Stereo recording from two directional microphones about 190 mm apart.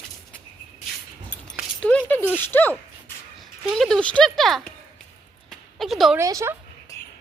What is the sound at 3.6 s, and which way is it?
Speech, centre (ahead or behind).